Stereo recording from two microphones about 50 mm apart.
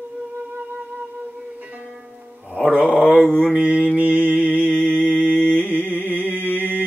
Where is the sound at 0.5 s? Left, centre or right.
Right.